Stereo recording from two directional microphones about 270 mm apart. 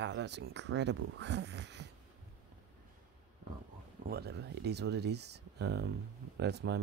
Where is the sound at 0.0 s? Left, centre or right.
Right.